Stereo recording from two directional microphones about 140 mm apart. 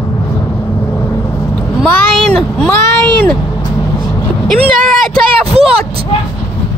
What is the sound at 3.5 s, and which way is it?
Vehicle, 25° left (ahead or behind).